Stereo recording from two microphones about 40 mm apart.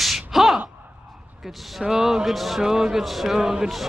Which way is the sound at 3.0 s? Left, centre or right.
Centre.